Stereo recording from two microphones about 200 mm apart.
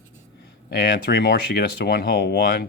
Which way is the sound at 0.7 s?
50° left (ahead or behind).